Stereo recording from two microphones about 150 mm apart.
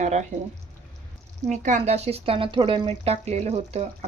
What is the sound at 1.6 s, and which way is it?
A woman's voice, 50° right (ahead or behind).